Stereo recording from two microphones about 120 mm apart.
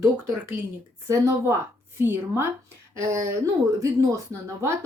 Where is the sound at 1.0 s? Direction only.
25° right (ahead or behind).